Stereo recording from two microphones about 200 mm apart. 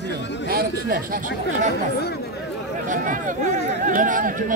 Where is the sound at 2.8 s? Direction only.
40° right (ahead or behind).